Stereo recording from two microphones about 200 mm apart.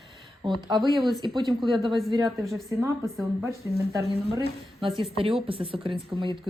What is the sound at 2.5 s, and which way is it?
Speech, 15° right (ahead or behind).